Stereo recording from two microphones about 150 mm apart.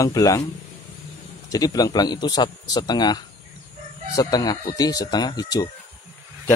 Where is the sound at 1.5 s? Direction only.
25° left (ahead or behind).